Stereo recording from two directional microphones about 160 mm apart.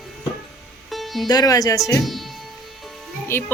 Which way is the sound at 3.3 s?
15° left (ahead or behind).